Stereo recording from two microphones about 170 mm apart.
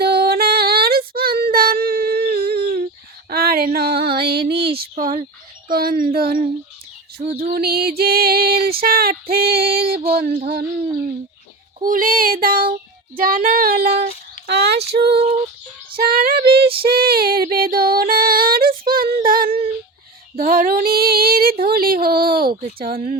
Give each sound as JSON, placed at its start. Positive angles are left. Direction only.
{"t": 0.0, "sound": "female singing", "side_deg": -65}
{"t": 3.2, "sound": "a sound", "side_deg": -65}
{"t": 5.6, "sound": "female singing", "side_deg": -60}
{"t": 11.8, "sound": "female singing", "side_deg": -55}
{"t": 14.4, "sound": "speech", "side_deg": -75}
{"t": 14.8, "sound": "a sound", "side_deg": -70}
{"t": 16.0, "sound": "female singing", "side_deg": -60}
{"t": 16.5, "sound": "female singing", "side_deg": -35}
{"t": 16.8, "sound": "child singing", "side_deg": -60}
{"t": 20.3, "sound": "female singing", "side_deg": -55}